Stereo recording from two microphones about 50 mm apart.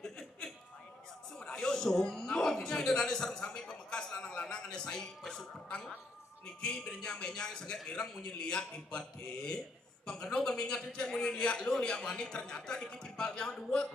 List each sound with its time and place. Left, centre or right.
1.4 s a man's voice: centre